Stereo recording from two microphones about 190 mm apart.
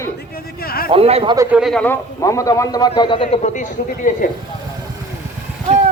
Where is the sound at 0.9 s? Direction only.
30° right (ahead or behind).